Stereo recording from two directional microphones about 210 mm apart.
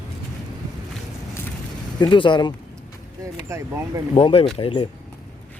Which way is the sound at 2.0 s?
25° left (ahead or behind).